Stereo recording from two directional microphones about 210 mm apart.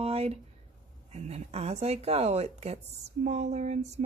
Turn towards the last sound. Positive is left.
turn(degrees=-30)  # may be behind; listen again after turning